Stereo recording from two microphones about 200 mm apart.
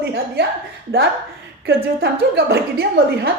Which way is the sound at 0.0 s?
55° right (ahead or behind).